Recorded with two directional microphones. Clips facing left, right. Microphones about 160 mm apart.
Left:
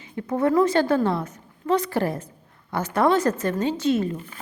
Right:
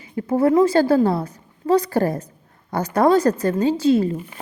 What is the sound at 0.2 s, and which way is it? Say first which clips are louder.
Speech: right 4 dB; 30° right (ahead or behind).